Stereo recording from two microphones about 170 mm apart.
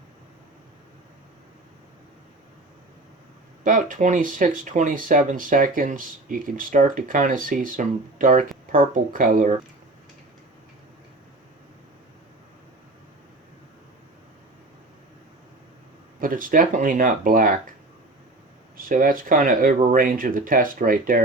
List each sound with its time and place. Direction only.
3.6 s speech: 50° right (ahead or behind)
16.2 s speech: 55° right (ahead or behind)
18.9 s speech: 55° right (ahead or behind)